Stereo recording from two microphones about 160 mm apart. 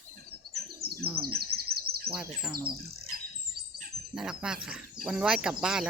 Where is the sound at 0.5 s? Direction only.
80° right.